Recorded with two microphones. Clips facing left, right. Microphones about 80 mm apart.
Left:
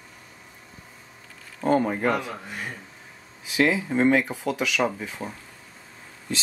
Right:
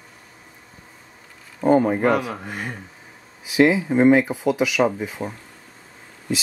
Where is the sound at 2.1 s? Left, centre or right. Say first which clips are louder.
Right 5 dB; right.